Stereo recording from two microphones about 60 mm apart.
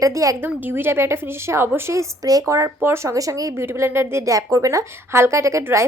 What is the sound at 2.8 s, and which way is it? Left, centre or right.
Speech, right.